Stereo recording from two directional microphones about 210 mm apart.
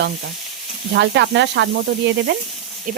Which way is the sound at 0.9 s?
55° right (ahead or behind).